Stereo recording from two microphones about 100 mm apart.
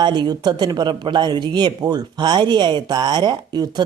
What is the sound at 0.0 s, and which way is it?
Speech, 50° right (ahead or behind).